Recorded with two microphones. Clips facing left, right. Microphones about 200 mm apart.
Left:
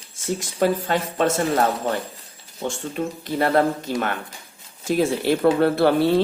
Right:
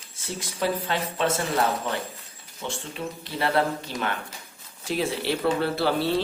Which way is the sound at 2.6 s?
45° left (ahead or behind).